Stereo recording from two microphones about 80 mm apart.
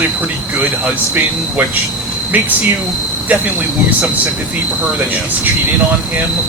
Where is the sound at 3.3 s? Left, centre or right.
Centre.